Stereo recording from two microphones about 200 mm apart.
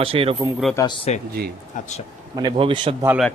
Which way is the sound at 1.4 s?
50° right (ahead or behind).